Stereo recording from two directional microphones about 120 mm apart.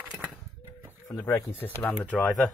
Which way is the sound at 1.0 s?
25° left (ahead or behind).